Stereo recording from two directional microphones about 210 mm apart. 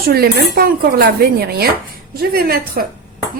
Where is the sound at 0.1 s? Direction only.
45° right (ahead or behind).